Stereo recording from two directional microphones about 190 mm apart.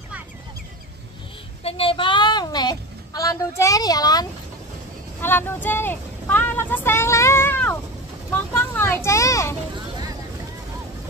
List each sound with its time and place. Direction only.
1.6 s a woman's voice: 30° left (ahead or behind)
9.8 s vehicle: 20° right (ahead or behind)